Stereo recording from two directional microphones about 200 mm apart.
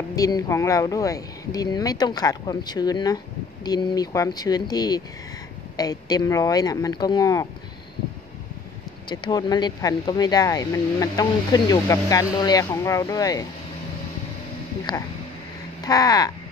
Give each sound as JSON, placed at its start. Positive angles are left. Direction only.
{"t": 0.1, "sound": "speech", "side_deg": 15}
{"t": 9.1, "sound": "speech", "side_deg": 20}
{"t": 14.9, "sound": "speech", "side_deg": 20}